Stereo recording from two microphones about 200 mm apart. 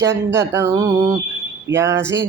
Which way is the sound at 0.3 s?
15° right (ahead or behind).